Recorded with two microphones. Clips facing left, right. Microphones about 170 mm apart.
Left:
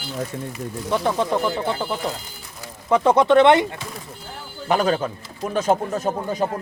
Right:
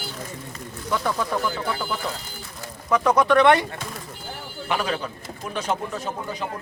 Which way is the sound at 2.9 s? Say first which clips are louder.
Left 3 dB; 30° left (ahead or behind).